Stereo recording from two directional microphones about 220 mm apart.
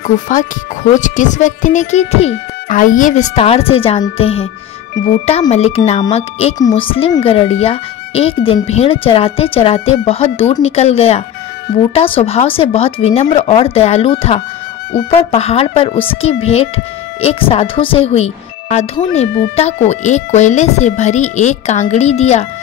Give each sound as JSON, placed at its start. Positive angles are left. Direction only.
{"t": 0.0, "sound": "speech", "side_deg": 35}